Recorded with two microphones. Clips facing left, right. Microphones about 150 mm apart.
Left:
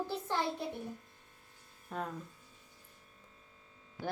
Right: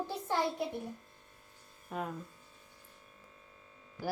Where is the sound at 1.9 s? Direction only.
5° right (ahead or behind).